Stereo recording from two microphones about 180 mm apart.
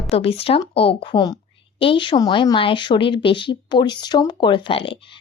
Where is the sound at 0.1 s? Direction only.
30° left (ahead or behind).